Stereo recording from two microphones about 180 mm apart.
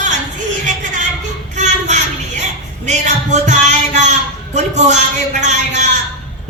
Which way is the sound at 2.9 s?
40° right (ahead or behind).